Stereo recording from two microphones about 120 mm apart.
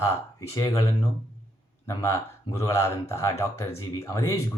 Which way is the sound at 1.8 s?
25° left (ahead or behind).